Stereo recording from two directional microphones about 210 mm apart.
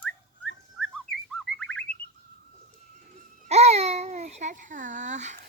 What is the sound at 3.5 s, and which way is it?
Babbling, 30° right (ahead or behind).